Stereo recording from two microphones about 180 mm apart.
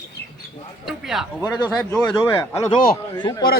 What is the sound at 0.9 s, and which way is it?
A man's voice, centre (ahead or behind).